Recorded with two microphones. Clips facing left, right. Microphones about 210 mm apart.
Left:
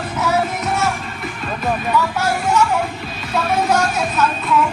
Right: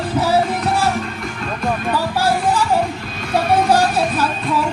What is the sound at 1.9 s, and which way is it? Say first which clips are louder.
Music: right 2 dB; 30° right (ahead or behind).